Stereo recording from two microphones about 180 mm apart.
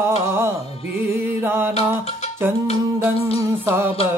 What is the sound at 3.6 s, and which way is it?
Music, 10° right (ahead or behind).